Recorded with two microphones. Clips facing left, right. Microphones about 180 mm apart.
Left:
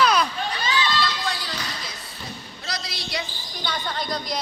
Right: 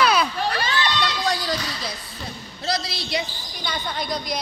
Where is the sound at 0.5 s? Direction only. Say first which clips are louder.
Right 1 dB; 60° right (ahead or behind).